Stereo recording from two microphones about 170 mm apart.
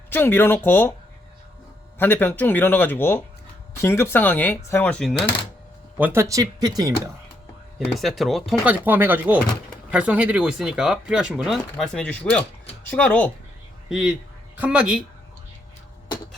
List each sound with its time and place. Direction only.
0.1 s speech: 10° left (ahead or behind)
2.0 s speech: 10° left (ahead or behind)
6.0 s speech: 15° right (ahead or behind)
7.9 s speech: centre (ahead or behind)
13.9 s speech: 5° right (ahead or behind)